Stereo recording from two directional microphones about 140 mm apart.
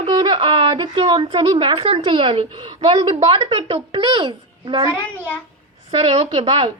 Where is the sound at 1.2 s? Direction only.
50° right (ahead or behind).